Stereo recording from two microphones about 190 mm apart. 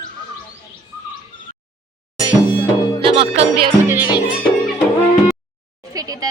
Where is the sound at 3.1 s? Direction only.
30° right (ahead or behind).